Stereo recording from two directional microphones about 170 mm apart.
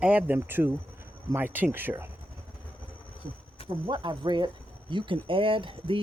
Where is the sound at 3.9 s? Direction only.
30° right (ahead or behind).